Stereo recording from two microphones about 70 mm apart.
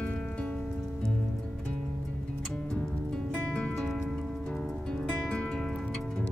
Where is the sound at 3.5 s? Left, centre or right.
Centre.